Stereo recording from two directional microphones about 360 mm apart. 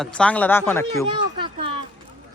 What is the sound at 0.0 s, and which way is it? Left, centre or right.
Speech, centre.